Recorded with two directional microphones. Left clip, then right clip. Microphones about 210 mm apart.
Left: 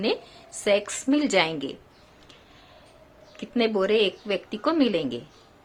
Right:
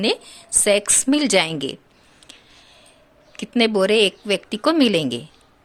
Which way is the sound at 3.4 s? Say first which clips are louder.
Right 6 dB; 50° right (ahead or behind).